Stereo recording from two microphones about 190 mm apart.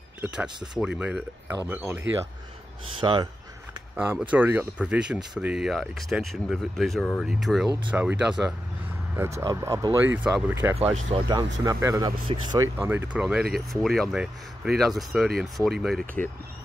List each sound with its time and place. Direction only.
0.2 s speech: 5° right (ahead or behind)
3.0 s speech: 25° right (ahead or behind)
3.9 s speech: 10° right (ahead or behind)
9.4 s speech: 20° right (ahead or behind)
11.0 s speech: 30° right (ahead or behind); by 16.1 s centre (ahead or behind)